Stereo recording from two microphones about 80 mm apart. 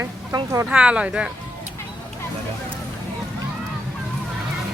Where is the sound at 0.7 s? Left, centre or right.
Centre.